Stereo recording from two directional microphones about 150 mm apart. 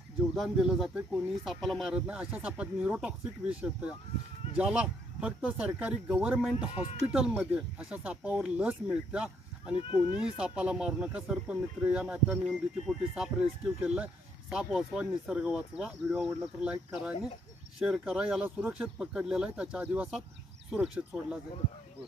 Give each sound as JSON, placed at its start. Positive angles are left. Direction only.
{"t": 0.3, "sound": "speech", "side_deg": -5}
{"t": 9.8, "sound": "speech", "side_deg": 35}
{"t": 10.2, "sound": "speech", "side_deg": -5}